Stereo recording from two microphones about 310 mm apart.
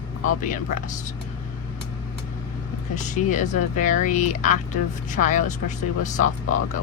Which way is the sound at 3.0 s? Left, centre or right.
Left.